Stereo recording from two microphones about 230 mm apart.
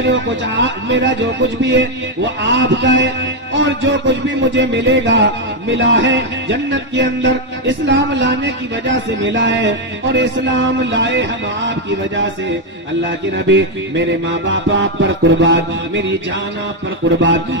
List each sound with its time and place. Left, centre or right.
0.0 s music: right
13.5 s music: right
17.2 s music: right